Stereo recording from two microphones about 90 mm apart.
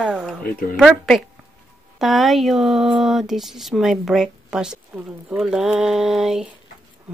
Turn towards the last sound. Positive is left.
turn(degrees=-5)  # may be behind; listen again after turning